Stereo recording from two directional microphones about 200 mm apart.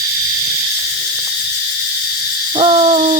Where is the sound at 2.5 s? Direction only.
25° right (ahead or behind).